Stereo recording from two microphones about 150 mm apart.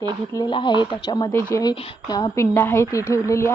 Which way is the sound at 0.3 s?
30° left (ahead or behind).